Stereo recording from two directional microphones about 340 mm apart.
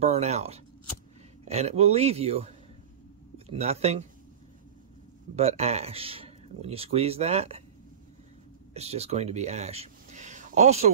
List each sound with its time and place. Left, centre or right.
0.0 s speech: centre
5.3 s speech: centre
8.7 s speech: centre